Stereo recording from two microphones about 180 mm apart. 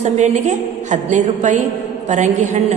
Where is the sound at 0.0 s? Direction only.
40° right (ahead or behind).